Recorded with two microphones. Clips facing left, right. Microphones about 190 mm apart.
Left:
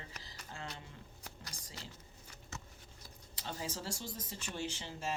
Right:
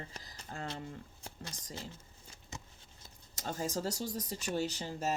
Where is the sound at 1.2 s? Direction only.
25° right (ahead or behind).